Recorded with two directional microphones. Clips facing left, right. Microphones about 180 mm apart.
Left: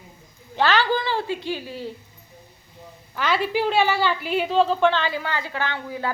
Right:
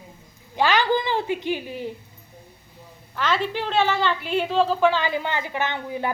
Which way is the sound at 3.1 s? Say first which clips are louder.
Left 2 dB; 5° left (ahead or behind).